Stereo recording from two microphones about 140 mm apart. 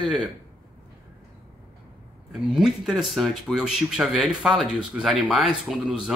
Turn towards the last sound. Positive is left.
turn(degrees=-5)  # may be behind; listen again after turning